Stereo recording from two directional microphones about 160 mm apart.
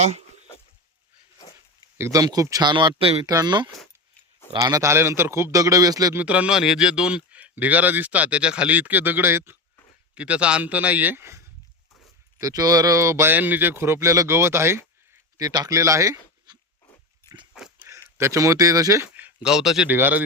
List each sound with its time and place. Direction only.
2.0 s a man's voice: 20° right (ahead or behind); by 3.2 s 35° right (ahead or behind)
3.2 s a man's voice: 25° right (ahead or behind)
6.1 s speech: 10° right (ahead or behind)
17.2 s dog: 30° right (ahead or behind)
17.5 s a sound: 5° right (ahead or behind)
18.2 s a man's voice: 20° right (ahead or behind)
19.0 s speech: 10° right (ahead or behind)